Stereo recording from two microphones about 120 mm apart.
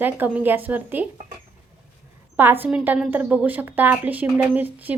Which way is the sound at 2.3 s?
15° right (ahead or behind).